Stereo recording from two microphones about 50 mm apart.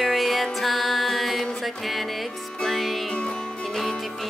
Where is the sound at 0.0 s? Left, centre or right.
Centre.